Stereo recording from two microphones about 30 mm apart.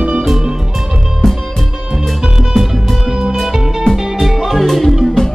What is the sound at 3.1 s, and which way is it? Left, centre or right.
Music, right.